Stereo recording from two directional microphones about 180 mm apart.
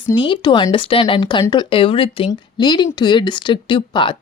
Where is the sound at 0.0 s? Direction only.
25° left (ahead or behind).